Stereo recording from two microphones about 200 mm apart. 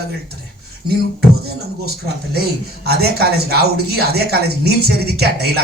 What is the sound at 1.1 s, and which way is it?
Speech, 55° right (ahead or behind).